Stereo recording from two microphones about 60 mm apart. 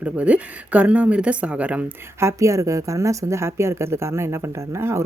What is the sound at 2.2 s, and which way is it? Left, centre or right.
A woman's voice, right.